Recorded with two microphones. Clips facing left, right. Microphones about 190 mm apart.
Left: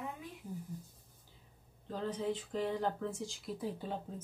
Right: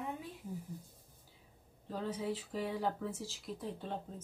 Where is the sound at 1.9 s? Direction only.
5° right (ahead or behind).